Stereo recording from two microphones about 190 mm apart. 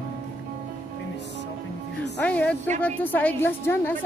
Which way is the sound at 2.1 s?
5° left (ahead or behind).